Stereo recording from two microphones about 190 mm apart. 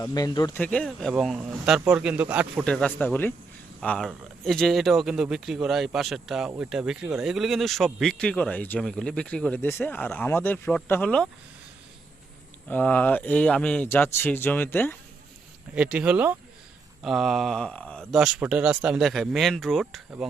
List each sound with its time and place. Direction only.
0.0 s speech: 20° left (ahead or behind)
0.6 s speech: 5° left (ahead or behind)
2.6 s speech: 5° left (ahead or behind)
12.6 s speech: 10° left (ahead or behind)
15.7 s speech: 5° right (ahead or behind)